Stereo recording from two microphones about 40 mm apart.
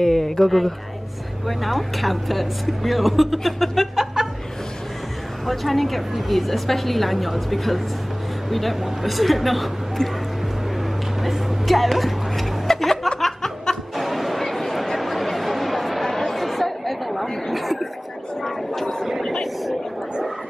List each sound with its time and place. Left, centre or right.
0.0 s speech: centre
5.5 s speech: centre
11.2 s a sound: centre
13.2 s snicker: centre
13.9 s chatter: centre
18.4 s a sound: centre